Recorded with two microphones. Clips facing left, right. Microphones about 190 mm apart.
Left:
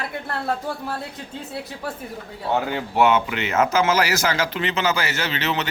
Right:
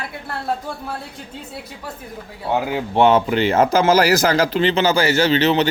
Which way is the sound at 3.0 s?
35° right (ahead or behind).